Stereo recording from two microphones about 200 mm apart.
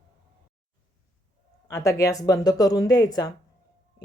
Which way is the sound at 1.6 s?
15° left (ahead or behind).